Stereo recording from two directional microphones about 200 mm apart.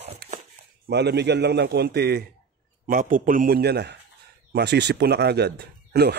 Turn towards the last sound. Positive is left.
turn(degrees=-55)  # may be behind; listen again after turning